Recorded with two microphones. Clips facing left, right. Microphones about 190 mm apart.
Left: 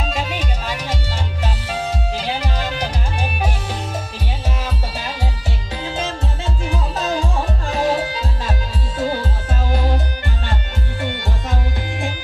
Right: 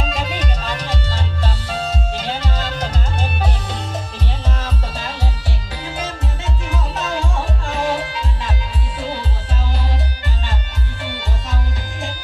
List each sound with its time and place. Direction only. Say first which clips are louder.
0.0 s music: even; 5° left (ahead or behind)
4.6 s music: left 1 dB; 10° left (ahead or behind)
5.9 s music: left 2 dB; 25° left (ahead or behind)
7.6 s music: left 3 dB; 35° left (ahead or behind)
8.9 s music: left 5 dB; 45° left (ahead or behind)